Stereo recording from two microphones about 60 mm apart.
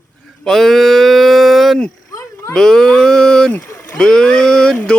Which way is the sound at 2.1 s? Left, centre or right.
Left.